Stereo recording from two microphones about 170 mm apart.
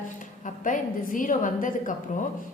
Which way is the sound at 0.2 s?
50° left (ahead or behind).